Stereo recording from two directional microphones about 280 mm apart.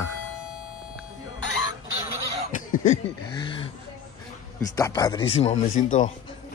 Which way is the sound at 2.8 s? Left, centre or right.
Left.